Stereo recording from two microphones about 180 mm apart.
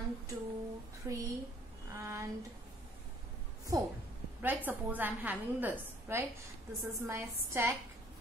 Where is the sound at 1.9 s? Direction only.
15° right (ahead or behind).